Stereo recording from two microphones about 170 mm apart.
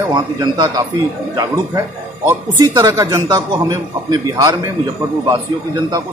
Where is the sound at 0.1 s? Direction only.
20° right (ahead or behind).